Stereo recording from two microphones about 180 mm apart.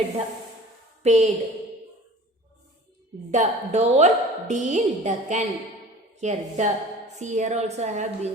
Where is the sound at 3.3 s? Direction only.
40° right (ahead or behind).